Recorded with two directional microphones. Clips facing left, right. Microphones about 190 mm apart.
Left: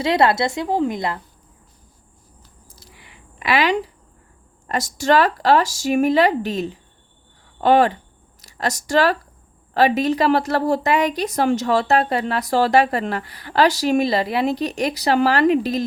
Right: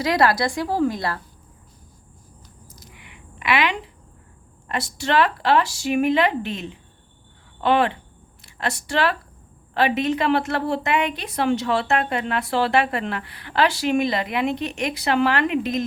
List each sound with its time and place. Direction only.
0.0 s a woman's voice: 25° left (ahead or behind)
2.6 s a sound: 30° left (ahead or behind)
4.6 s a woman's voice: 45° left (ahead or behind)